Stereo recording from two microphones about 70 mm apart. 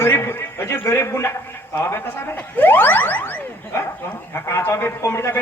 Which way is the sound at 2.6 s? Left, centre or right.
Left.